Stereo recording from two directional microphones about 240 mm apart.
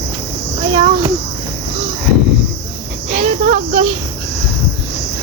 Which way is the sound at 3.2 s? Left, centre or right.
Right.